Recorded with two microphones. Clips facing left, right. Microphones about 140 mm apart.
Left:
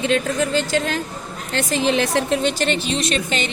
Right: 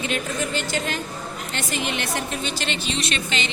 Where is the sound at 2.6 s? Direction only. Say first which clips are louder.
Left 6 dB; 45° left (ahead or behind).